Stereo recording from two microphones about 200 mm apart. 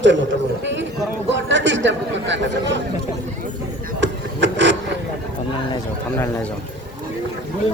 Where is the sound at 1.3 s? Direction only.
65° right (ahead or behind).